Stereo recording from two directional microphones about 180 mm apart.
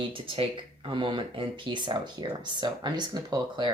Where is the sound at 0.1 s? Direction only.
30° right (ahead or behind).